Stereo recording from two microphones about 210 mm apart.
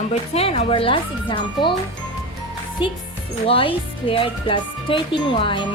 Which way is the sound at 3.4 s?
25° left (ahead or behind).